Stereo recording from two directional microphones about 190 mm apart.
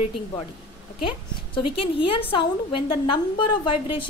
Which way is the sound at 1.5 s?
30° left (ahead or behind).